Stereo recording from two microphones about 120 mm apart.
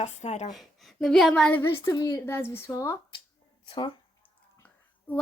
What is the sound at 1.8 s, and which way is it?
Speech, 30° left (ahead or behind).